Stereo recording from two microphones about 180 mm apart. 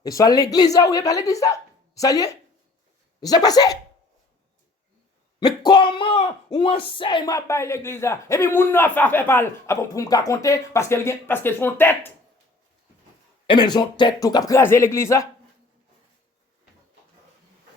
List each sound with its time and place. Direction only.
0.0 s speech: 20° left (ahead or behind)
5.4 s speech: 25° left (ahead or behind)
13.5 s speech: 25° left (ahead or behind)